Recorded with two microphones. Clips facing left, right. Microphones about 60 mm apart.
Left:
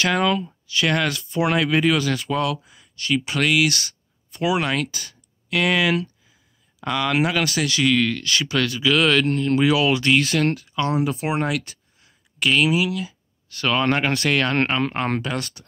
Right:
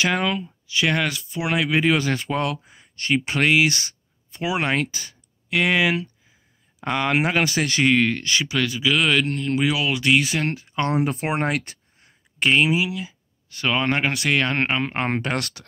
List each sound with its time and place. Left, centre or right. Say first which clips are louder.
0.0 s speech: left 2 dB; centre
1.9 s speech: even; right
8.5 s speech: left 3 dB; centre
10.8 s speech: right 1 dB; right; by 15.0 s centre
15.0 s speech: even; right
15.3 s speech: right 1 dB; right